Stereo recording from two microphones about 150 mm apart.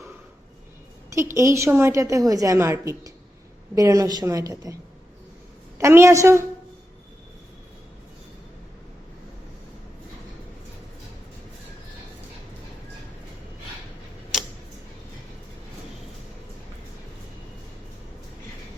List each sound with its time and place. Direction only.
1.1 s a woman's voice: 20° right (ahead or behind)
5.8 s a woman's voice: 20° right (ahead or behind)